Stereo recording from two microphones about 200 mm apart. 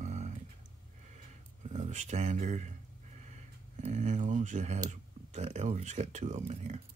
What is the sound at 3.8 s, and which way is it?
Speech, 35° right (ahead or behind).